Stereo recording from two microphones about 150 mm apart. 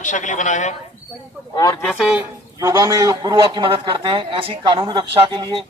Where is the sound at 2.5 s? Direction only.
25° right (ahead or behind).